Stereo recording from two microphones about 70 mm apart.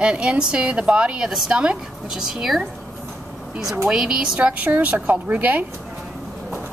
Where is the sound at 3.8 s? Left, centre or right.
Centre.